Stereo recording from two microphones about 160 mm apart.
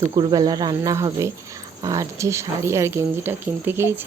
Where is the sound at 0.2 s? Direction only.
25° right (ahead or behind).